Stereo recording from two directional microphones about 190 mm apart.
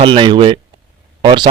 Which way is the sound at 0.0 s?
25° right (ahead or behind).